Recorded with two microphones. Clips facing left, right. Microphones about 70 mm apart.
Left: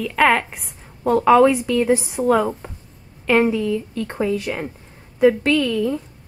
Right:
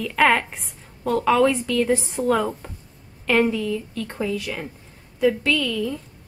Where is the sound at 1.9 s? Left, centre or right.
Centre; by 6.0 s left.